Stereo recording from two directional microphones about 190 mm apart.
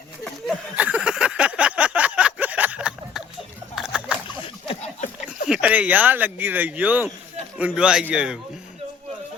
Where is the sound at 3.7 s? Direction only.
5° right (ahead or behind).